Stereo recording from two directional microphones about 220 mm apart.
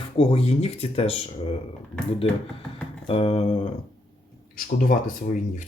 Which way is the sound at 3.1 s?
25° left (ahead or behind).